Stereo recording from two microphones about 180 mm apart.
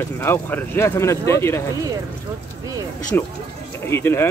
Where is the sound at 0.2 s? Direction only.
10° left (ahead or behind).